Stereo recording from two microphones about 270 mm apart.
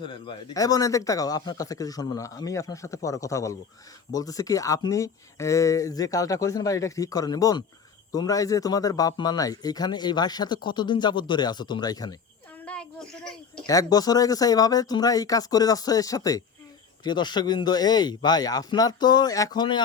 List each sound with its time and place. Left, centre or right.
0.0 s speech: centre
12.6 s a child's voice: centre
13.7 s speech: centre